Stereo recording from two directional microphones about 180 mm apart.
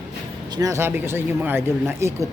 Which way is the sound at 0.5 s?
20° right (ahead or behind).